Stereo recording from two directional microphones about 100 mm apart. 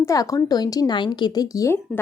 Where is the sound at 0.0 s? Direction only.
35° left (ahead or behind).